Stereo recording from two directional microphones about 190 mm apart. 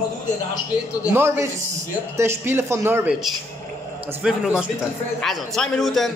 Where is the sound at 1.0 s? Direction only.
10° right (ahead or behind).